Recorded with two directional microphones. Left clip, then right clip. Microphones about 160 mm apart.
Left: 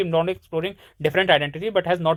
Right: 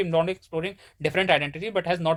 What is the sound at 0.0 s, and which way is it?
Speech, 30° left (ahead or behind).